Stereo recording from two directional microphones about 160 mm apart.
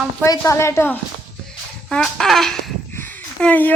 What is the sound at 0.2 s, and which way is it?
Speech, 20° left (ahead or behind).